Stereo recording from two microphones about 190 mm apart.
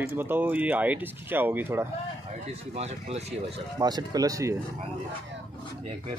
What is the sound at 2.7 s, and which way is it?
Speech, 35° right (ahead or behind).